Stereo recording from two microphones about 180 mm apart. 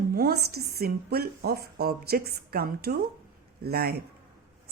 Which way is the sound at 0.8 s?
60° right (ahead or behind).